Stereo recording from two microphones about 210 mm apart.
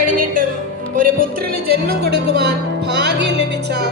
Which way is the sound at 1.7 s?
50° right (ahead or behind).